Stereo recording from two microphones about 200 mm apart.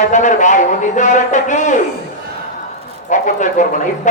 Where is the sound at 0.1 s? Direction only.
35° left (ahead or behind).